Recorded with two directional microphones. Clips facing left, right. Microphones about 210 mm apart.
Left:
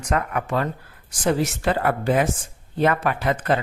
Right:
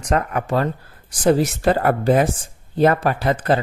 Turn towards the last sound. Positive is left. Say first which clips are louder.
# right 3 dB
turn(degrees=-35)  # may be behind; listen again after turning